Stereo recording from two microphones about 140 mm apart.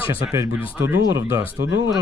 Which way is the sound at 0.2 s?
20° right (ahead or behind).